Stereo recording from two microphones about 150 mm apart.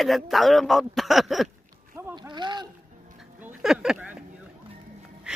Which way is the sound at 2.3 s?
30° right (ahead or behind).